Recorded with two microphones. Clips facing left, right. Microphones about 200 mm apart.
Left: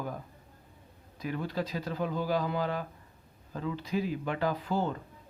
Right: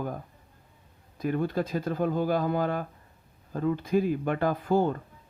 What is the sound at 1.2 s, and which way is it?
Speech, 50° right (ahead or behind).